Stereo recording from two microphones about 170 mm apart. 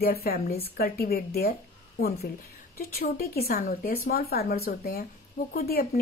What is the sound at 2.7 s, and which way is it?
A woman's voice, 60° left (ahead or behind).